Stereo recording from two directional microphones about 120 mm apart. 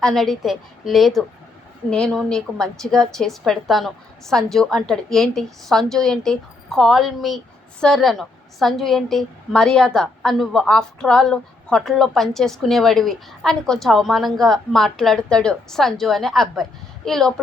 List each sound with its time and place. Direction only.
0.0 s a woman's voice: centre (ahead or behind)